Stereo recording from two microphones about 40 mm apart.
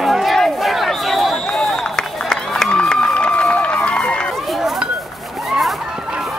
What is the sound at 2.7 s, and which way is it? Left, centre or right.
Run, left.